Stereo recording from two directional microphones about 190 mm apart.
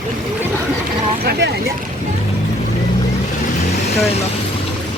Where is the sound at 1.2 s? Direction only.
55° right (ahead or behind).